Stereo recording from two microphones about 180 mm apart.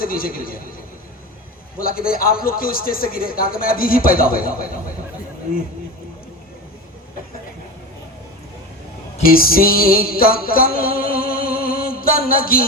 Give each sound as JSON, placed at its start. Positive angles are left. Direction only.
{"t": 0.0, "sound": "a man's voice", "side_deg": 55}
{"t": 1.8, "sound": "a man's voice", "side_deg": 55}
{"t": 9.2, "sound": "music", "side_deg": 55}